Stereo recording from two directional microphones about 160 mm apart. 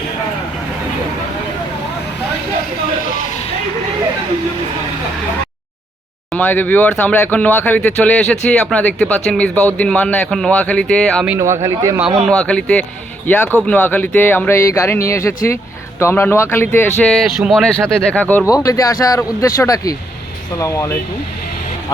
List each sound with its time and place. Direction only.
6.3 s speech: 10° left (ahead or behind)
11.3 s speech: 15° right (ahead or behind)
12.0 s speech: centre (ahead or behind); by 16.9 s 15° left (ahead or behind)
17.0 s speech: centre (ahead or behind); by 20.9 s 20° left (ahead or behind)